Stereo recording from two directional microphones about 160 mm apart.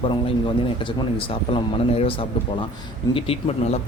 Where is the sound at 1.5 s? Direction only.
35° left (ahead or behind).